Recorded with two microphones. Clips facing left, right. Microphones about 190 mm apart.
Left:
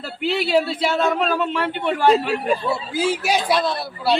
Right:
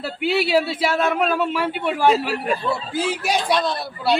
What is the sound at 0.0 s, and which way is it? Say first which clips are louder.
A man's voice: right 2 dB; 5° right (ahead or behind).